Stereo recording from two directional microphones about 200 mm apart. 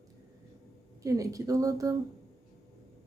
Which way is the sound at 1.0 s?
15° right (ahead or behind).